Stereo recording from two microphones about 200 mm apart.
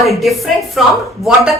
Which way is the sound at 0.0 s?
Centre (ahead or behind).